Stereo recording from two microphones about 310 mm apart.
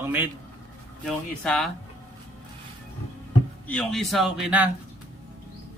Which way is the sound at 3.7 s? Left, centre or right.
Centre.